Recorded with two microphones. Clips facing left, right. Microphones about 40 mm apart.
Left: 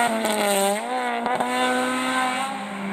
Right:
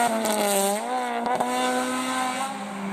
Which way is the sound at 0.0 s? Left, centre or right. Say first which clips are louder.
Left 1 dB; left.